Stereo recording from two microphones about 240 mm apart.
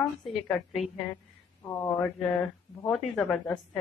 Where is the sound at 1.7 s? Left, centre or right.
Centre.